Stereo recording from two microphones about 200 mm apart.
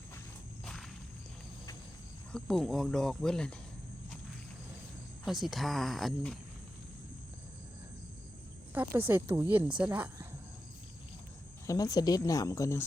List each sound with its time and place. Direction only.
0.6 s a sound: 5° left (ahead or behind)
2.3 s speech: centre (ahead or behind)
5.2 s speech: centre (ahead or behind)
8.7 s speech: 10° right (ahead or behind)
11.6 s speech: 15° left (ahead or behind)